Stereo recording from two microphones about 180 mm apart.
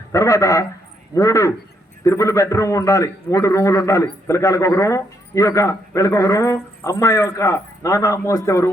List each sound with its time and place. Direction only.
0.1 s a man's voice: 15° left (ahead or behind)